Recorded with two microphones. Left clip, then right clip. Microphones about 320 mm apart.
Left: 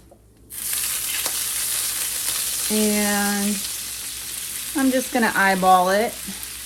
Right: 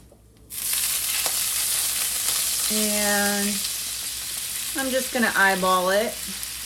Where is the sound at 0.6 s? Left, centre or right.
Centre.